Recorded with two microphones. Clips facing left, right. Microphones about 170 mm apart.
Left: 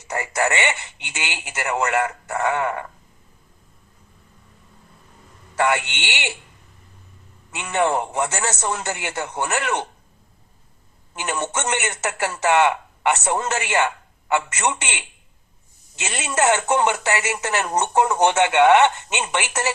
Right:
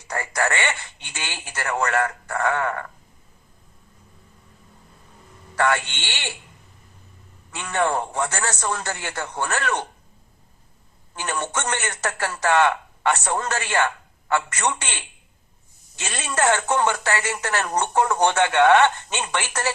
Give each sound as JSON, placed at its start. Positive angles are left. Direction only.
{"t": 0.1, "sound": "speech", "side_deg": 20}
{"t": 5.5, "sound": "speech", "side_deg": 15}
{"t": 7.5, "sound": "speech", "side_deg": 20}
{"t": 11.1, "sound": "a man's voice", "side_deg": 20}